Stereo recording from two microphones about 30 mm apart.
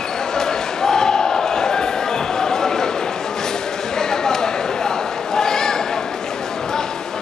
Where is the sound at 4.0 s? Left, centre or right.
Centre.